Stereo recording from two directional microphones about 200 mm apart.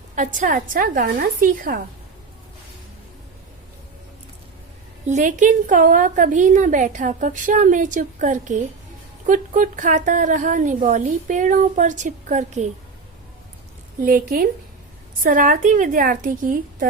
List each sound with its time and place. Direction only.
0.2 s a woman's voice: 40° right (ahead or behind)
5.0 s a woman's voice: 40° right (ahead or behind)
14.0 s a woman's voice: 45° right (ahead or behind)